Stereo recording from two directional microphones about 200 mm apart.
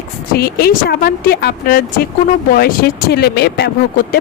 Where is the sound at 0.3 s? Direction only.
50° left (ahead or behind).